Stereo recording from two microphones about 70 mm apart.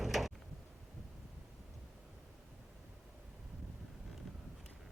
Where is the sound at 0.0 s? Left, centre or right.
Centre.